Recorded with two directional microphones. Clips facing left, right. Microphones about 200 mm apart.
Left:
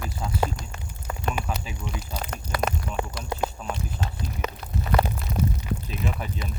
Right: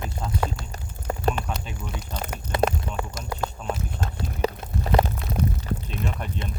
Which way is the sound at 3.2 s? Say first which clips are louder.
Even; 45° right (ahead or behind).